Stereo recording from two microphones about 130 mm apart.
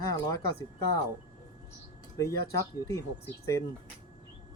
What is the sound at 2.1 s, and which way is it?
Speech, 25° left (ahead or behind).